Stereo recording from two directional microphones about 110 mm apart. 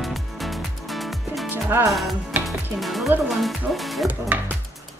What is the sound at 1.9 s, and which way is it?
Speech, centre (ahead or behind).